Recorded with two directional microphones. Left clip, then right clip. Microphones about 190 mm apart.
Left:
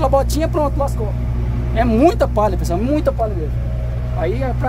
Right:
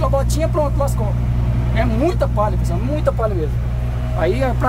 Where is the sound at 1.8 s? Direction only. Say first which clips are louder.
Left 6 dB; 35° left (ahead or behind).